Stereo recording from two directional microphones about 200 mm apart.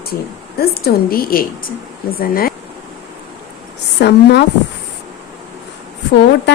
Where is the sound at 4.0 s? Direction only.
55° left (ahead or behind).